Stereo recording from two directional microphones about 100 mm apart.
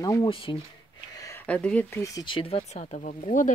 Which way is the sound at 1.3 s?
15° left (ahead or behind).